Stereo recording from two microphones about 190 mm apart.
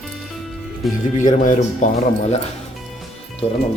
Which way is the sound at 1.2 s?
40° left (ahead or behind).